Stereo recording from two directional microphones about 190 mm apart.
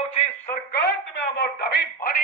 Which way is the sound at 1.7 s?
50° left (ahead or behind).